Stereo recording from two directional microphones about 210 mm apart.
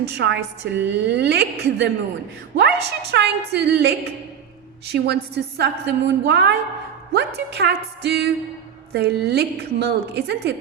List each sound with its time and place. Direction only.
0.0 s a woman's voice: 55° right (ahead or behind)